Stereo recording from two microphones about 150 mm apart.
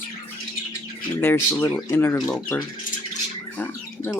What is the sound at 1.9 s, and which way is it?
Speech, 15° left (ahead or behind).